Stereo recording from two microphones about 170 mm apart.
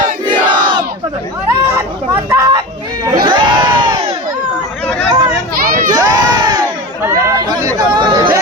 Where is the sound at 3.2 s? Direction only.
25° right (ahead or behind).